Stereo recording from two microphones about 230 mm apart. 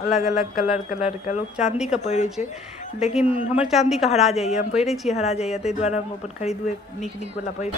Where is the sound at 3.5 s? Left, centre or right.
Centre.